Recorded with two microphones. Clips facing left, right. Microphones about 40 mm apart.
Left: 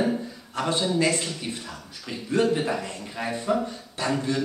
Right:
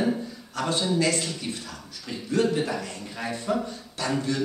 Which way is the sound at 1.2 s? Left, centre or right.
Centre.